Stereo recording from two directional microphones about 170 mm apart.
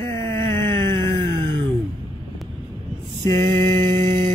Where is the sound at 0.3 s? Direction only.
15° left (ahead or behind).